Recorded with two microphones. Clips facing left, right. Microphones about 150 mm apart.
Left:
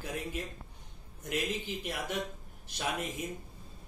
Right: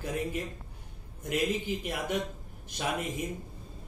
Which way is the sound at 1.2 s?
50° right (ahead or behind).